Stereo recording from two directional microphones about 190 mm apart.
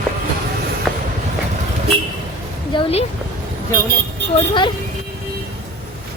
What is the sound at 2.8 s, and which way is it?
Speech, 30° left (ahead or behind).